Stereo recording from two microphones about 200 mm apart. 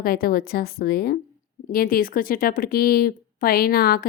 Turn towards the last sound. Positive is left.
turn(degrees=50)  # may be behind; listen again after turning